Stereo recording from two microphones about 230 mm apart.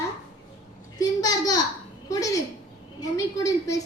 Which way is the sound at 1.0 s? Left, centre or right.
Centre.